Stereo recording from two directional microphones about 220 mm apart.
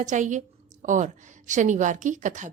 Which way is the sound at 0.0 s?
35° right (ahead or behind).